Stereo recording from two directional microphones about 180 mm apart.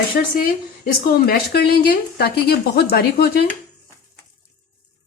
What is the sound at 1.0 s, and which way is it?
A woman's voice, 55° left (ahead or behind).